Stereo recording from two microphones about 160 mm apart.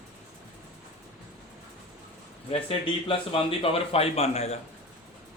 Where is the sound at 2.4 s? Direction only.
35° left (ahead or behind).